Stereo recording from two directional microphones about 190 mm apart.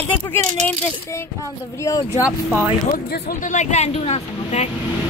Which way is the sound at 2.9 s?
55° left (ahead or behind).